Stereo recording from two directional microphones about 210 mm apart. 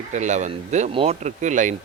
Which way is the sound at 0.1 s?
35° right (ahead or behind).